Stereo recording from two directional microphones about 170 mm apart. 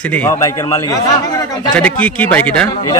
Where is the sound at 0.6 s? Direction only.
20° left (ahead or behind).